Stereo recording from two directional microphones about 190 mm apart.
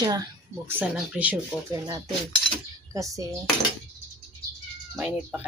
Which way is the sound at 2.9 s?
15° right (ahead or behind).